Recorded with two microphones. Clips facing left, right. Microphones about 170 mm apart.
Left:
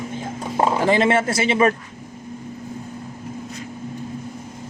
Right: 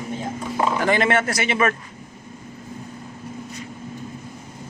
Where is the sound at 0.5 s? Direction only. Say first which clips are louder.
Left 3 dB; 30° left (ahead or behind).